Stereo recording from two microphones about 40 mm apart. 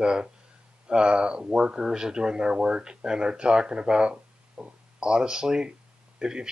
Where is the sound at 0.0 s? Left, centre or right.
Right.